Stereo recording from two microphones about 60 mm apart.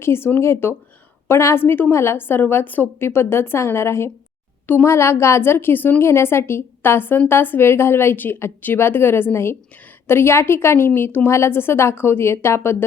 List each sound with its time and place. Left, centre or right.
0.0 s a woman's voice: left
1.3 s a woman's voice: left
1.5 s a woman's voice: left
1.9 s a woman's voice: left
4.6 s speech: left
4.9 s a woman's voice: left
11.3 s a woman's voice: left